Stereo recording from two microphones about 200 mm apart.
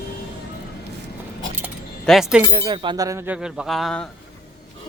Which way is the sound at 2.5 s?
20° right (ahead or behind).